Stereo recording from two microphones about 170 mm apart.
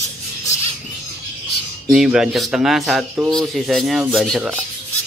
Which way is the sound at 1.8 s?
5° right (ahead or behind).